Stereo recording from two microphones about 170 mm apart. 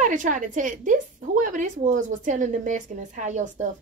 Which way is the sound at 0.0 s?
50° right (ahead or behind).